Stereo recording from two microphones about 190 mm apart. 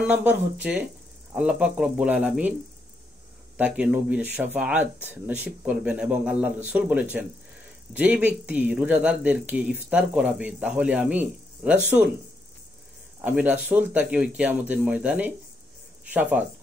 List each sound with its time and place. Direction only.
0.0 s speech: 10° right (ahead or behind)
3.5 s speech: 5° right (ahead or behind)
13.2 s speech: 10° right (ahead or behind)